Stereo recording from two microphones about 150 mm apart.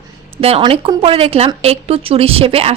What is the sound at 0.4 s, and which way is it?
A woman's voice, 40° right (ahead or behind).